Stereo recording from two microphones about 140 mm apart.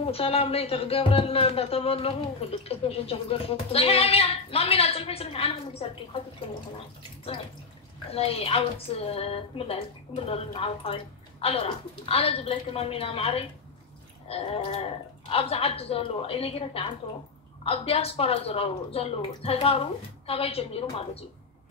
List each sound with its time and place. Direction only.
0.0 s speech: 45° left (ahead or behind)
8.1 s speech: 45° left (ahead or behind)